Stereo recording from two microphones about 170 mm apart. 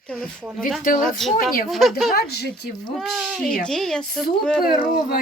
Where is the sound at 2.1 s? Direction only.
65° left (ahead or behind).